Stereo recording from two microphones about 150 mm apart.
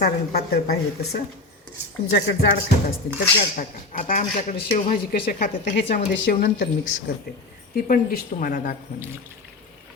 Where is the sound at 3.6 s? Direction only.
65° left (ahead or behind).